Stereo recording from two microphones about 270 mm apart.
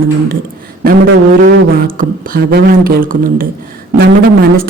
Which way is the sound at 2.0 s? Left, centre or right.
Right.